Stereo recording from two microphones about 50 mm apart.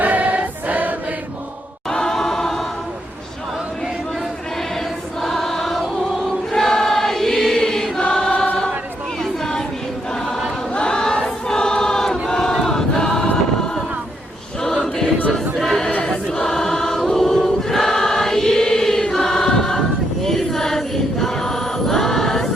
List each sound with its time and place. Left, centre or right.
0.0 s choir: right
1.9 s choir: centre
5.2 s choir: centre
9.4 s a sound: centre
10.8 s choir: centre
13.3 s a sound: centre
14.6 s choir: centre